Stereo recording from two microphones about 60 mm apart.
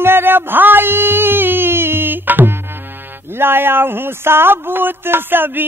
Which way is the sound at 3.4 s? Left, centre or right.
Right.